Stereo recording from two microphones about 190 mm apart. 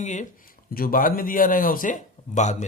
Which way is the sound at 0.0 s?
40° left (ahead or behind).